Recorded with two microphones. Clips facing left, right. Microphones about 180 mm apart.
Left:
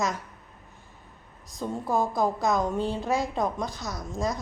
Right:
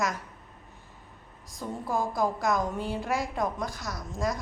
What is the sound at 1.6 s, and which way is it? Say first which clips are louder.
A woman's voice: left 3 dB; 20° left (ahead or behind).